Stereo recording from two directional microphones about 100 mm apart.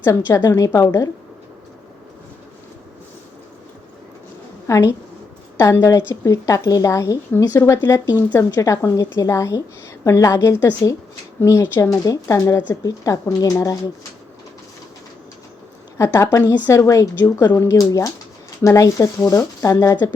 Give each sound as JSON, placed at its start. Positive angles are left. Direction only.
{"t": 0.4, "sound": "a woman's voice", "side_deg": 35}
{"t": 4.7, "sound": "a woman's voice", "side_deg": 30}
{"t": 8.4, "sound": "a woman's voice", "side_deg": 35}
{"t": 16.0, "sound": "a woman's voice", "side_deg": 25}